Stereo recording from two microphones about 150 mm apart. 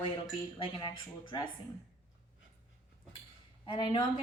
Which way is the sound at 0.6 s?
30° left (ahead or behind).